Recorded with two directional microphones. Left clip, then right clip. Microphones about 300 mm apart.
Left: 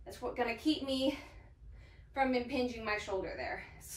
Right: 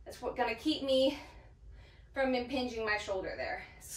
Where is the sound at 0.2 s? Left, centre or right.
Centre.